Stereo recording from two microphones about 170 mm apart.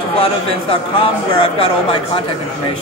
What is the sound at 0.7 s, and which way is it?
Speech, 30° left (ahead or behind).